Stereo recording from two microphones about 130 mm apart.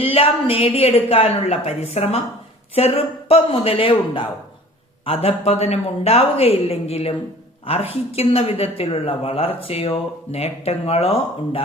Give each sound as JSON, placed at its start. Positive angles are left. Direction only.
{"t": 0.0, "sound": "speech", "side_deg": 50}